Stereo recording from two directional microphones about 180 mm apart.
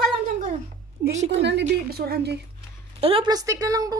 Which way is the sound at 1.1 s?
35° right (ahead or behind).